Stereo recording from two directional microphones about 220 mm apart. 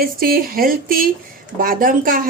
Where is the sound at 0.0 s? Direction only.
40° right (ahead or behind).